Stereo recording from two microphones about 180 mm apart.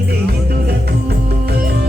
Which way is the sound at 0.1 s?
60° right (ahead or behind).